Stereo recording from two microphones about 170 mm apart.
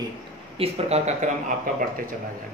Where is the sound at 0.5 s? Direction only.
35° right (ahead or behind).